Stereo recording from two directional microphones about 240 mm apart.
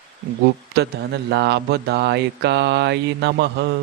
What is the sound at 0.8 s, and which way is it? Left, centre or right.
Speech, right.